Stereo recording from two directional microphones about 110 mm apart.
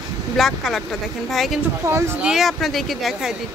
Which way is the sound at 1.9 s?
25° right (ahead or behind).